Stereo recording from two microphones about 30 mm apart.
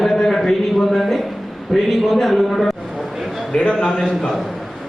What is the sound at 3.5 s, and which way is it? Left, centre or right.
Speech, left.